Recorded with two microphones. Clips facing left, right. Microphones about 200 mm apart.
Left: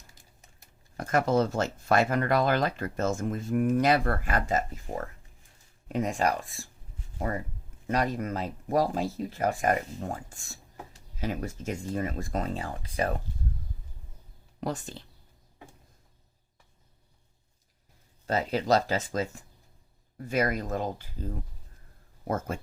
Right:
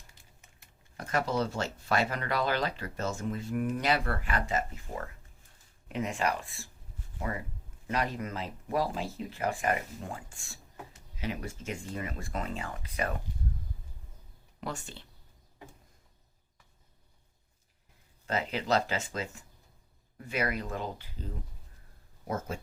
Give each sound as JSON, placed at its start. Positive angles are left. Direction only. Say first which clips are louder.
{"t": 0.1, "sound": "speech", "louder": "left 2 dB", "side_deg": 40}
{"t": 5.9, "sound": "speech", "louder": "left 4 dB", "side_deg": 40}
{"t": 7.9, "sound": "speech", "louder": "left 4 dB", "side_deg": 45}
{"t": 14.6, "sound": "speech", "louder": "left 6 dB", "side_deg": 40}
{"t": 18.3, "sound": "speech", "louder": "left 5 dB", "side_deg": 40}